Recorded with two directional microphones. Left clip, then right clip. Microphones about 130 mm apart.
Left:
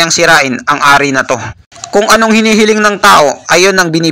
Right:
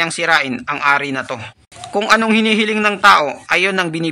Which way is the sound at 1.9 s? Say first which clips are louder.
Left 7 dB; 5° left (ahead or behind).